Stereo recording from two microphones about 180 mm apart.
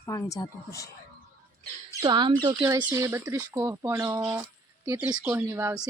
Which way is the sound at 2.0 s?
25° right (ahead or behind).